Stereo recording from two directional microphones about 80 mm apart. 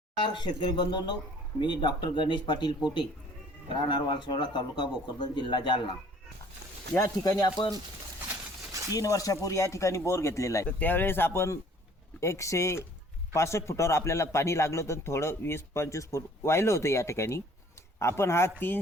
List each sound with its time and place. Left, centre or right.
0.2 s speech: left
6.9 s speech: left
8.9 s a man's voice: left
10.8 s speech: left
12.2 s a man's voice: left